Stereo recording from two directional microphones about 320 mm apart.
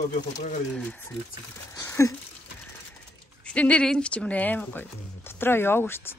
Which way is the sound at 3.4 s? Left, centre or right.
Centre.